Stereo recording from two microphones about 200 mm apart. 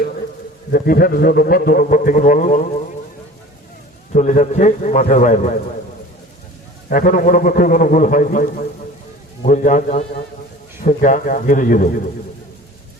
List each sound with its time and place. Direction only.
0.7 s a man's voice: 50° left (ahead or behind)
4.1 s a man's voice: 35° left (ahead or behind)
6.9 s a man's voice: 40° left (ahead or behind)